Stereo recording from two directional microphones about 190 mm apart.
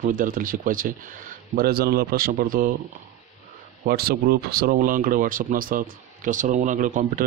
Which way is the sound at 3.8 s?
55° right (ahead or behind).